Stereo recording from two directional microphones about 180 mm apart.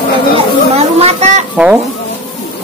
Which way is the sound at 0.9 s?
35° right (ahead or behind).